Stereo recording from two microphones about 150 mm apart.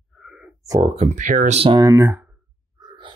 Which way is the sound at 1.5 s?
35° right (ahead or behind).